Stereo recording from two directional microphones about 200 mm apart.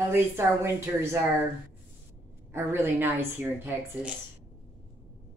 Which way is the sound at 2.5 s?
10° right (ahead or behind).